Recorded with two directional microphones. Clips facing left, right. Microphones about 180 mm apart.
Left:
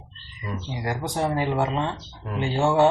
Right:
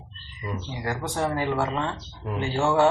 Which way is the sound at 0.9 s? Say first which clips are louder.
Left 1 dB; 15° left (ahead or behind).